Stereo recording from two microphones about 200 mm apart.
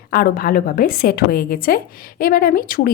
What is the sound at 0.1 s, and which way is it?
A woman's voice, 50° left (ahead or behind).